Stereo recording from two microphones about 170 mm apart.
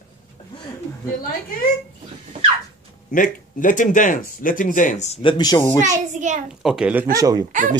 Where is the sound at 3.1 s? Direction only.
55° left (ahead or behind).